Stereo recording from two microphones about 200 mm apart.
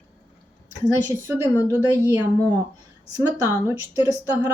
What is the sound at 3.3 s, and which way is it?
Speech, 15° right (ahead or behind).